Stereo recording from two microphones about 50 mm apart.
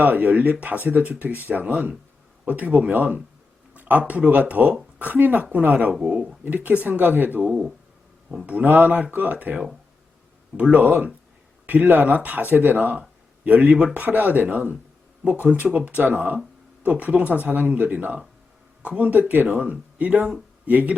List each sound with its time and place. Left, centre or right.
0.0 s speech: right
10.7 s speech: right
16.9 s speech: right
19.1 s speech: right